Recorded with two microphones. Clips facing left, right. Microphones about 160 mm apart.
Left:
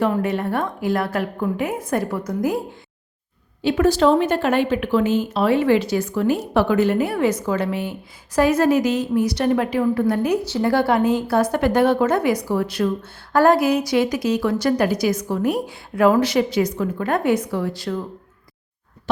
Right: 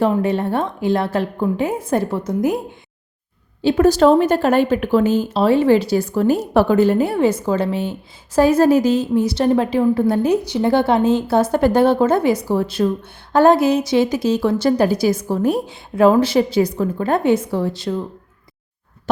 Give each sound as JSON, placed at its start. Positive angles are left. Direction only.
{"t": 0.0, "sound": "a woman's voice", "side_deg": -30}
{"t": 3.6, "sound": "a woman's voice", "side_deg": -35}